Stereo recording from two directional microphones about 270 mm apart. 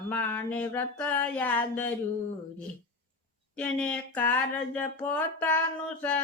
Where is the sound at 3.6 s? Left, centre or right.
Centre.